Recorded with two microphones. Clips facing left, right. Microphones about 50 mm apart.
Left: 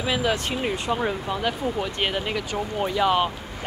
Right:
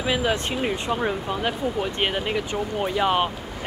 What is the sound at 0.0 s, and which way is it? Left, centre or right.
Speech, centre.